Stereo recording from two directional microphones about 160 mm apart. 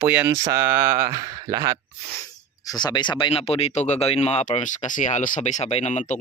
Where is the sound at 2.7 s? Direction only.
25° left (ahead or behind); by 6.0 s 45° left (ahead or behind).